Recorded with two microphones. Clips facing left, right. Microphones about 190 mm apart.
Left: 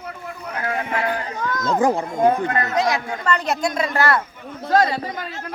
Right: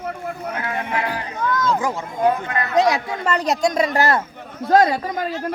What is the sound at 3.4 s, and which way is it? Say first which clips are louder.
Speech: right 3 dB; 40° right (ahead or behind).